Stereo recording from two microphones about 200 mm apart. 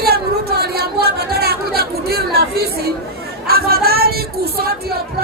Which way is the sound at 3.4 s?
50° right (ahead or behind).